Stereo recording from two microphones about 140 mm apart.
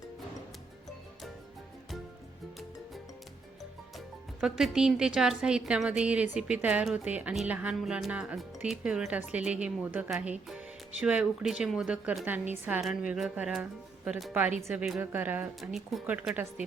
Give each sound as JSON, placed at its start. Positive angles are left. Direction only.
{"t": 3.9, "sound": "a woman's voice", "side_deg": 0}
{"t": 14.6, "sound": "a woman's voice", "side_deg": -15}
{"t": 15.7, "sound": "speech", "side_deg": 0}
{"t": 16.0, "sound": "a woman's voice", "side_deg": -10}